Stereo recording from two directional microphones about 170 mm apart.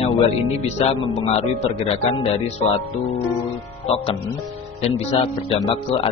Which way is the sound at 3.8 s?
35° left (ahead or behind).